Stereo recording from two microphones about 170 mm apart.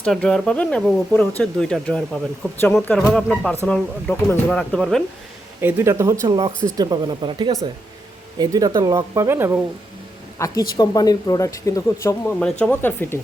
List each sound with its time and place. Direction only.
0.0 s speech: 5° left (ahead or behind)
5.5 s speech: 15° right (ahead or behind)
10.3 s speech: 20° left (ahead or behind)